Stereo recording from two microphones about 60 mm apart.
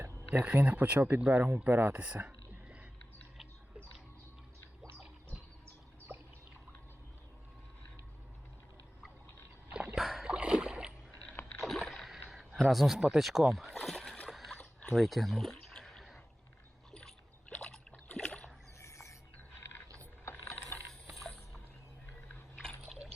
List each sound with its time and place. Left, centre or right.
0.3 s speech: right
2.0 s whispering: right
9.9 s splash: centre
10.2 s rowboat: centre
11.6 s rowboat: centre
12.6 s speech: centre
13.8 s splash: centre
14.3 s dog: centre
14.6 s a sound: left
14.9 s speech: centre
15.7 s a sound: centre
16.9 s rowboat: centre
18.8 s a sound: left
19.5 s a sound: left